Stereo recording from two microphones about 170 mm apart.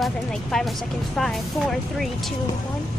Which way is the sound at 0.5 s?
5° left (ahead or behind).